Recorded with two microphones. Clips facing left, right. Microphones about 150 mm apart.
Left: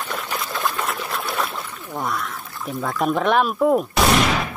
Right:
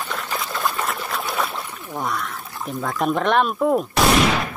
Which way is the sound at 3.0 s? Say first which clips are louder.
Even; centre (ahead or behind).